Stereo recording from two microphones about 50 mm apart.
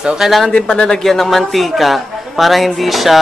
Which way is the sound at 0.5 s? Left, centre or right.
Left.